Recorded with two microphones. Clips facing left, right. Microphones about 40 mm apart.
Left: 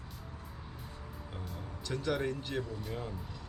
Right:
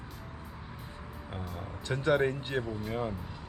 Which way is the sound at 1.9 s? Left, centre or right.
Right.